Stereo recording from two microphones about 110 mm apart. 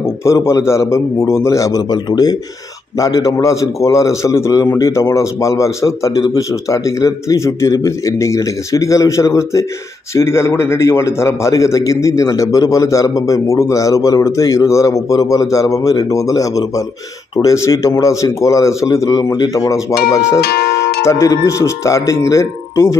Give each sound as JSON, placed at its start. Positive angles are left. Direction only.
{"t": 0.0, "sound": "a man's voice", "side_deg": 25}